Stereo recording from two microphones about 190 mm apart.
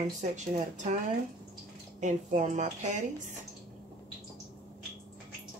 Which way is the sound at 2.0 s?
40° right (ahead or behind).